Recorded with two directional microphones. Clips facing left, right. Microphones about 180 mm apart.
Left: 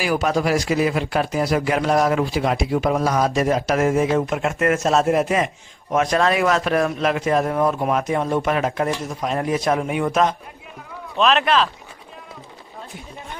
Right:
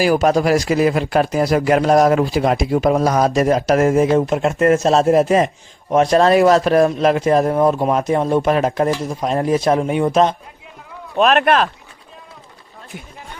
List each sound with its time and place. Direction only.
0.0 s speech: 40° right (ahead or behind)
11.2 s speech: 55° right (ahead or behind)